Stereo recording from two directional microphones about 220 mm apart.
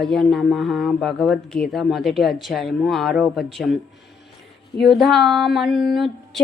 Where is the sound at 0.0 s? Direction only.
Centre (ahead or behind).